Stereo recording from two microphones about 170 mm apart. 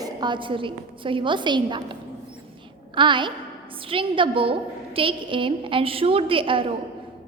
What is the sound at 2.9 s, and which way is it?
A woman's voice, 30° right (ahead or behind).